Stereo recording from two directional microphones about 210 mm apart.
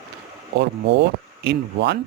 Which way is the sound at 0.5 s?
55° right (ahead or behind).